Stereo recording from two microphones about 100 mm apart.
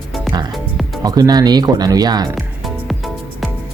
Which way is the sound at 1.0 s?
40° right (ahead or behind).